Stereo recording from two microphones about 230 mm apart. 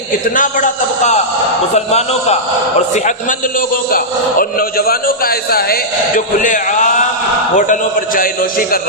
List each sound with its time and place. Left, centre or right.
0.3 s a man's voice: left